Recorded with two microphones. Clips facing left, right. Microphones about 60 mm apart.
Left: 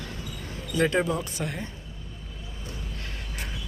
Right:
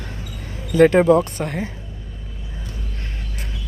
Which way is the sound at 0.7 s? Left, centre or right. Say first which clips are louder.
Right 12 dB; right.